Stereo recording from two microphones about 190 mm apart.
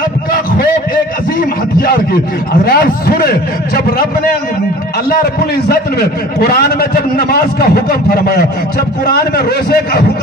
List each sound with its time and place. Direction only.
2.6 s a man's voice: 55° left (ahead or behind)
5.1 s a man's voice: 55° left (ahead or behind)